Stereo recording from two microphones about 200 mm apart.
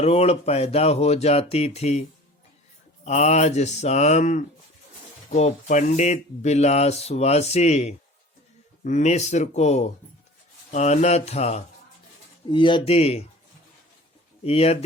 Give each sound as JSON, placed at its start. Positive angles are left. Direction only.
{"t": 0.0, "sound": "speech", "side_deg": 30}
{"t": 14.4, "sound": "speech", "side_deg": 30}